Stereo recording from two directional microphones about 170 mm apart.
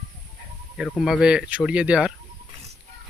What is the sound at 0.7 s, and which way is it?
Speech, centre (ahead or behind).